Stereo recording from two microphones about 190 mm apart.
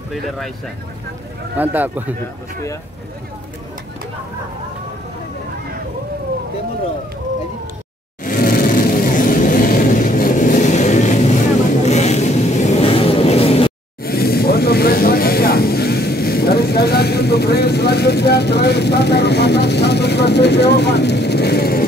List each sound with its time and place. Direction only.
1.6 s speech: 10° right (ahead or behind)
8.2 s vehicle: 50° left (ahead or behind); by 13.7 s 30° left (ahead or behind)
14.0 s speech: 55° left (ahead or behind)